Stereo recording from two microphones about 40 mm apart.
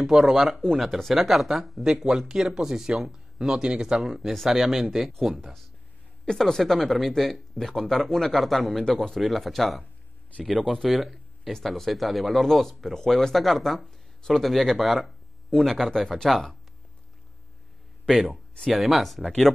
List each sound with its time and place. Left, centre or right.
0.0 s speech: centre
4.2 s speech: centre
6.2 s speech: centre
9.2 s speech: centre
13.8 s a sound: centre
14.4 s speech: centre
18.1 s speech: centre